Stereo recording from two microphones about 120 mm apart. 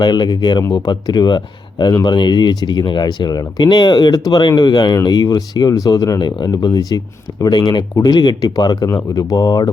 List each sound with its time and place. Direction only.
0.0 s speech: 40° left (ahead or behind)